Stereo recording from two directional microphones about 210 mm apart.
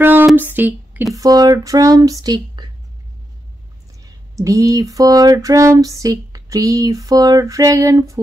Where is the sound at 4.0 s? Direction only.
15° right (ahead or behind).